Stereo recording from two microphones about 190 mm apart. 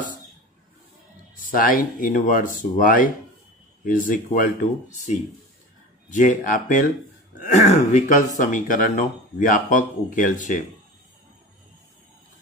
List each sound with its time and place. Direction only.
1.4 s speech: 45° left (ahead or behind)
6.1 s speech: 45° left (ahead or behind)